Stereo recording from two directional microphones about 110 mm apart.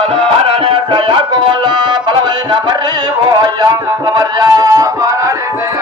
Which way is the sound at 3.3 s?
35° right (ahead or behind).